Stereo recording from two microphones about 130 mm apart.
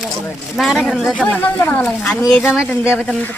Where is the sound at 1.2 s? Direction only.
10° left (ahead or behind).